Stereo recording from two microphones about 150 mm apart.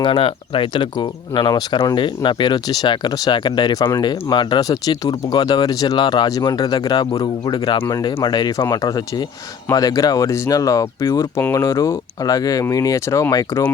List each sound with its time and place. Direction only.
0.0 s speech: 35° left (ahead or behind); by 13.6 s 20° left (ahead or behind)